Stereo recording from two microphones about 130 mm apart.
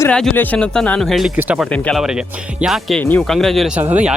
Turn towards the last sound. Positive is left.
turn(degrees=-10)  # may be behind; listen again after turning